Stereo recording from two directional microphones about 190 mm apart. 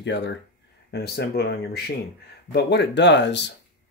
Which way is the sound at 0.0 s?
65° left (ahead or behind).